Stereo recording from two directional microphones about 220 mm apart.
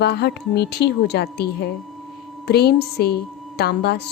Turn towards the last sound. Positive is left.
turn(degrees=45)  # may be behind; listen again after turning